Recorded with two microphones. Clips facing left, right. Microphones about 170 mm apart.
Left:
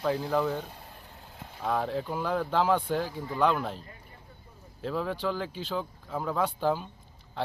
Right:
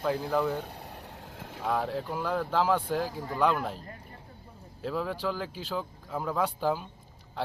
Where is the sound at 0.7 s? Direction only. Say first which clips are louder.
Right 5 dB; 70° right (ahead or behind); by 1.6 s 90° right.